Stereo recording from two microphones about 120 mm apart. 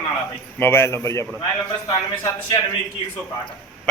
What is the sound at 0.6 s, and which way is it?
Speech, 20° left (ahead or behind).